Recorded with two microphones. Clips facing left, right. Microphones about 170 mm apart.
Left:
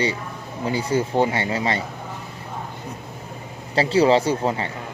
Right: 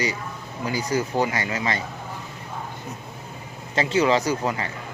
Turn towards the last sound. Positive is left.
turn(degrees=30)  # may be behind; listen again after turning